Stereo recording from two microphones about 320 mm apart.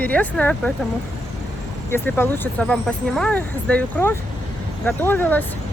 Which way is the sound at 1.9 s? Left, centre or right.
Centre.